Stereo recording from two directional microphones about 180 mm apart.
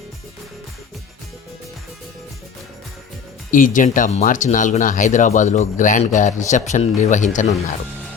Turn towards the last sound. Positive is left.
turn(degrees=45)  # may be behind; listen again after turning